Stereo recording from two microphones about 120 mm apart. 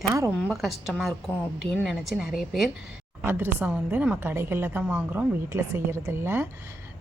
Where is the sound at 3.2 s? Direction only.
20° right (ahead or behind).